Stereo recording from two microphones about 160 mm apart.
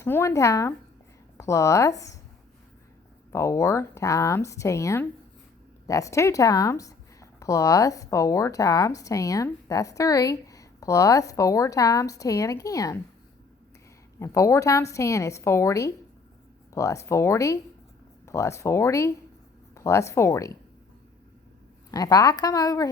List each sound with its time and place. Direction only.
0.0 s speech: 15° left (ahead or behind)
3.3 s speech: 20° left (ahead or behind)
14.2 s speech: 20° left (ahead or behind)
21.9 s speech: 25° left (ahead or behind)